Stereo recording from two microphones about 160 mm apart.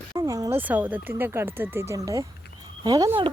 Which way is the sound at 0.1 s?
25° right (ahead or behind).